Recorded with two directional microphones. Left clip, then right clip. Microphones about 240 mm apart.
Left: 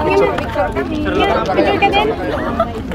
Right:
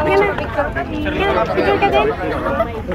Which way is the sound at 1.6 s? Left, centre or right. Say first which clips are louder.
Even; right.